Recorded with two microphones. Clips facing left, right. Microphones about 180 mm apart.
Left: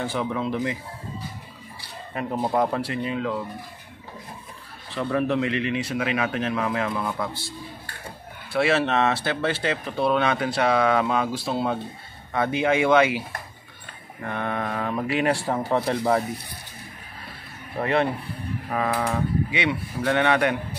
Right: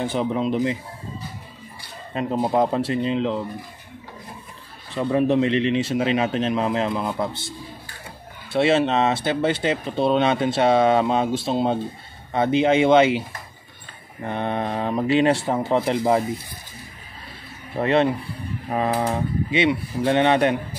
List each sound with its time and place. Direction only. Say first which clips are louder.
0.0 s speech: right 4 dB; 20° right (ahead or behind)
2.1 s speech: right 3 dB; 20° right (ahead or behind)
4.9 s speech: right 4 dB; 20° right (ahead or behind)
14.2 s speech: right 3 dB; 20° right (ahead or behind)
17.7 s speech: right 4 dB; 25° right (ahead or behind)